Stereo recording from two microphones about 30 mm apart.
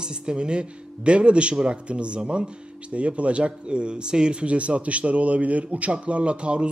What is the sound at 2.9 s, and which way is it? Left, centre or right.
Speech, right.